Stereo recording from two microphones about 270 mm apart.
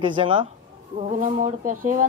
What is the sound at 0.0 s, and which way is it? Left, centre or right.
Speech, centre.